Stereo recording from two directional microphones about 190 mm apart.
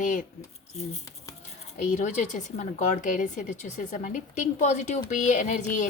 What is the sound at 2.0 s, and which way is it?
A woman's voice, 40° left (ahead or behind).